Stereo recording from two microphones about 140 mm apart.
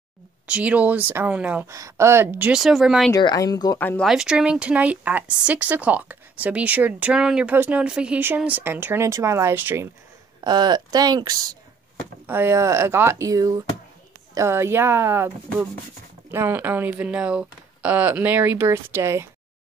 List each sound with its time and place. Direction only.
0.5 s speech: 10° right (ahead or behind)
1.7 s speech: 20° right (ahead or behind); by 3.1 s centre (ahead or behind)
3.1 s speech: 25° left (ahead or behind)
3.7 s speech: 15° left (ahead or behind)
4.0 s speech: 5° right (ahead or behind)
10.4 s speech: 30° right (ahead or behind)
12.3 s speech: 15° right (ahead or behind)